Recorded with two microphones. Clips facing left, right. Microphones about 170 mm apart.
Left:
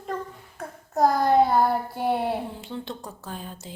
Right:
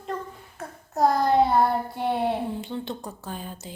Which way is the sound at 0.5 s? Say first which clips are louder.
Left 3 dB; centre (ahead or behind).